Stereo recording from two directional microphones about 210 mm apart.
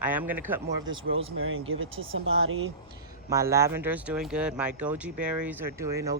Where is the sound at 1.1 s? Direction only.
70° right (ahead or behind).